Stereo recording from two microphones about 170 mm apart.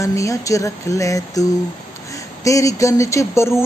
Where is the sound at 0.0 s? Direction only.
20° left (ahead or behind).